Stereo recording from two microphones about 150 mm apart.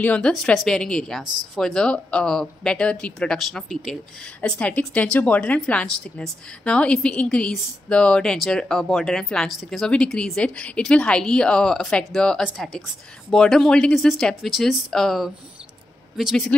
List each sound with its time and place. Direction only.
0.0 s a woman's voice: 5° left (ahead or behind)